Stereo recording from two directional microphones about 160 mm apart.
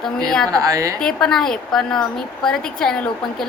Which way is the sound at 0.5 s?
20° right (ahead or behind).